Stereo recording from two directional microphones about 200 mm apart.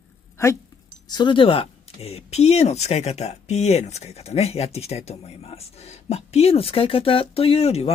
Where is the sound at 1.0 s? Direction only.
20° left (ahead or behind).